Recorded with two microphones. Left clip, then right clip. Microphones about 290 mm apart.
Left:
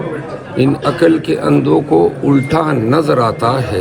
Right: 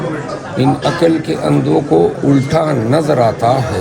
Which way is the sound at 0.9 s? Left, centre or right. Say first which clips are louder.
Left 1 dB; left.